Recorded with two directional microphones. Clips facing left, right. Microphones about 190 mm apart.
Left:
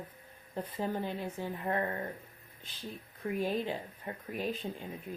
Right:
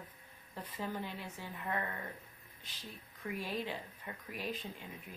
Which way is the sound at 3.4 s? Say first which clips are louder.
Left 7 dB; 50° left (ahead or behind).